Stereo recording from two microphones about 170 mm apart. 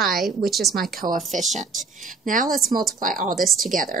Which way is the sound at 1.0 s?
55° right (ahead or behind).